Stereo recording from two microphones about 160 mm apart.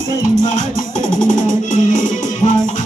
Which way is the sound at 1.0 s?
50° left (ahead or behind).